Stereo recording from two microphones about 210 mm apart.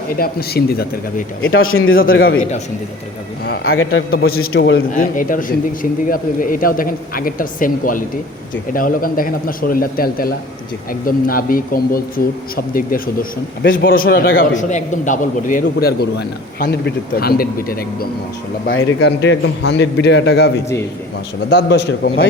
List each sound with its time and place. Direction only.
0.2 s a man's voice: 45° left (ahead or behind)
1.4 s a man's voice: 70° left (ahead or behind)
3.6 s a man's voice: 75° left (ahead or behind)
4.5 s a man's voice: 55° left (ahead or behind)
4.9 s a man's voice: 40° left (ahead or behind)
18.7 s a man's voice: 65° left (ahead or behind)
21.5 s a man's voice: 50° left (ahead or behind)